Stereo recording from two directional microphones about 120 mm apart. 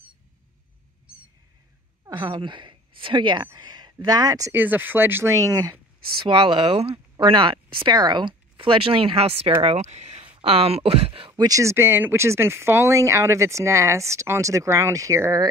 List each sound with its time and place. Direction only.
2.0 s a woman's voice: 40° right (ahead or behind)
4.6 s speech: 15° right (ahead or behind)
6.2 s speech: 50° right (ahead or behind)
11.4 s speech: 25° right (ahead or behind)